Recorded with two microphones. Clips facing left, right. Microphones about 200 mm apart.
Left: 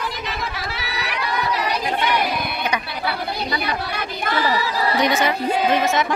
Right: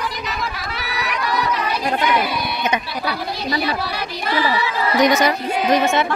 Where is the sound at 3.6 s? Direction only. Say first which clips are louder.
Right 3 dB; 50° left (ahead or behind).